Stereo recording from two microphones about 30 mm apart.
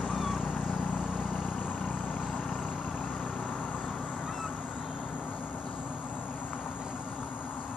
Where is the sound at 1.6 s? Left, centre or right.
Left.